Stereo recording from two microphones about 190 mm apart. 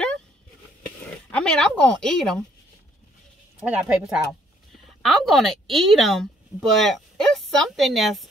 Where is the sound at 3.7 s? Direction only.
5° right (ahead or behind).